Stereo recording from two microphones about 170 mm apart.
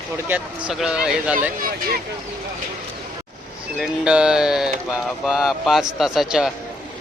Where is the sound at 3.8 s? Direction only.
5° right (ahead or behind).